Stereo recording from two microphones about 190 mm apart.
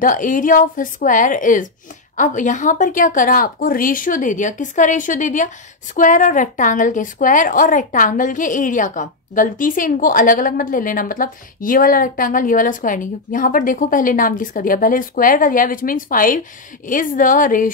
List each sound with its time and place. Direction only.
0.0 s a woman's voice: 45° left (ahead or behind)